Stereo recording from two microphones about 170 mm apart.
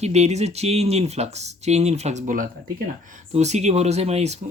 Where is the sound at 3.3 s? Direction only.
40° right (ahead or behind).